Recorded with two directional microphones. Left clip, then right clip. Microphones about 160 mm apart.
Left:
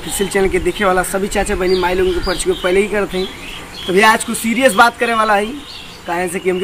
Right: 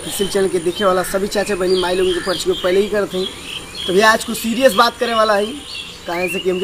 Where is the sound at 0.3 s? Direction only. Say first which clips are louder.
Left 2 dB; 35° left (ahead or behind).